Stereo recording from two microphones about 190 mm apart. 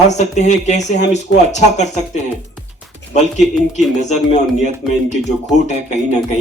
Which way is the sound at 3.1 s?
40° left (ahead or behind).